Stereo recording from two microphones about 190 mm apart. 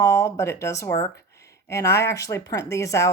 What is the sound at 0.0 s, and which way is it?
Speech, 15° left (ahead or behind).